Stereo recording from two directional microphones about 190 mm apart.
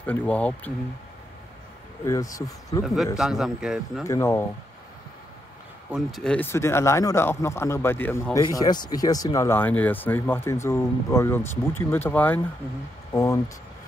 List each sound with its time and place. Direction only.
0.0 s speech: 5° left (ahead or behind)
2.0 s speech: 20° left (ahead or behind)
2.8 s a man's voice: centre (ahead or behind)
4.0 s speech: 15° left (ahead or behind)
5.9 s speech: centre (ahead or behind); by 13.4 s 15° left (ahead or behind)